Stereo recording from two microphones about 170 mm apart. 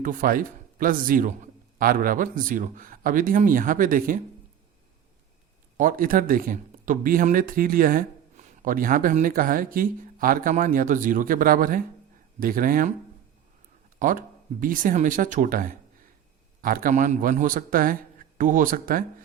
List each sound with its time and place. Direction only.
0.0 s a man's voice: 55° right (ahead or behind)
5.7 s speech: 55° right (ahead or behind)
14.0 s a man's voice: 55° right (ahead or behind)